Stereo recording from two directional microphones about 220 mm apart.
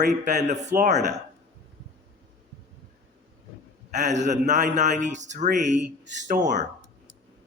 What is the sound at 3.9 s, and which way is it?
Speech, 30° right (ahead or behind).